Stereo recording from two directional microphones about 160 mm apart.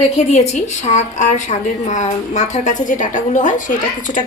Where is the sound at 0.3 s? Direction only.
45° left (ahead or behind).